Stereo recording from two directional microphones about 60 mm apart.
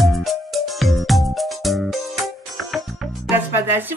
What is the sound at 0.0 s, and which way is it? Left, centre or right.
Music, centre.